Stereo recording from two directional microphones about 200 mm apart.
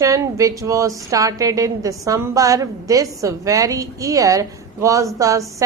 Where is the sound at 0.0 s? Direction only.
15° right (ahead or behind).